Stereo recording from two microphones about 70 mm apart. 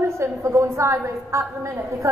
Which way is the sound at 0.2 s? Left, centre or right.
Right.